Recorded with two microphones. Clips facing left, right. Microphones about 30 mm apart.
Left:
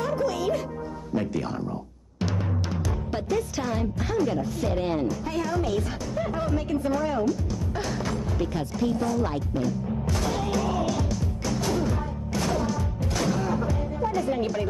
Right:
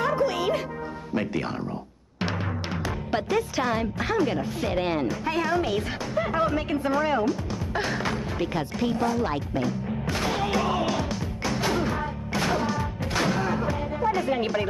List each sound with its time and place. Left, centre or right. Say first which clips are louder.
0.0 s music: right 2 dB; right
1.1 s speech: even; right
2.1 s music: even; right